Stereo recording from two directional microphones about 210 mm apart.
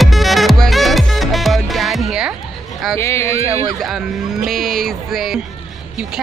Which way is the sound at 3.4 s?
30° right (ahead or behind).